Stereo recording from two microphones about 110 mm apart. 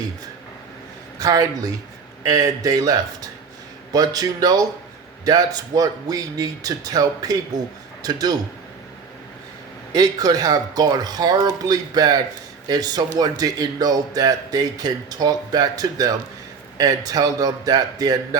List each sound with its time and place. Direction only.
1.2 s a man's voice: 35° right (ahead or behind)
9.9 s a man's voice: 35° right (ahead or behind)